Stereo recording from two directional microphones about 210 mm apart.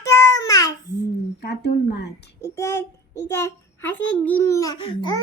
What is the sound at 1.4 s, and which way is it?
Speech, 50° left (ahead or behind).